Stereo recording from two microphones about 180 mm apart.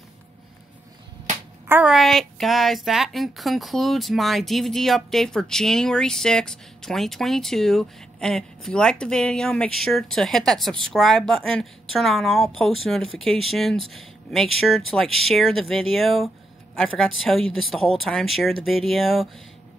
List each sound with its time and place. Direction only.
1.7 s a woman's voice: 5° right (ahead or behind)